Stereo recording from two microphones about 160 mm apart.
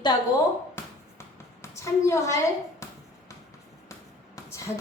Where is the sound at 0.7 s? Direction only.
15° left (ahead or behind).